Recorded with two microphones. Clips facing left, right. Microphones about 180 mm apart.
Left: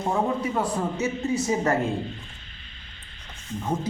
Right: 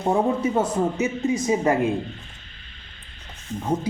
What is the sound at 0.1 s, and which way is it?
Speech, 25° right (ahead or behind).